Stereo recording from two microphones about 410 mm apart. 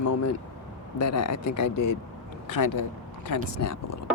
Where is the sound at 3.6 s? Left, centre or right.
Left.